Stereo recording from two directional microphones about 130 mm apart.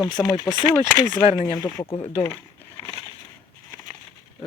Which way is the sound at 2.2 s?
15° left (ahead or behind).